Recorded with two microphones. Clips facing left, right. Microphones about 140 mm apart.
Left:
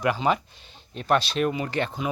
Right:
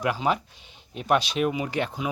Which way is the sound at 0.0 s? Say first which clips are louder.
Left 2 dB; 5° right (ahead or behind).